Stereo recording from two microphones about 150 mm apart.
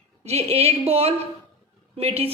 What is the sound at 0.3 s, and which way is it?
A woman's voice, 45° right (ahead or behind).